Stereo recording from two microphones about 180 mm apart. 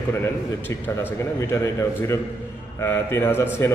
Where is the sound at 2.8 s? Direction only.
15° left (ahead or behind).